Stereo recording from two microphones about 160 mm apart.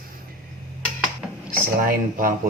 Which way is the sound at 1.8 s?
65° right (ahead or behind).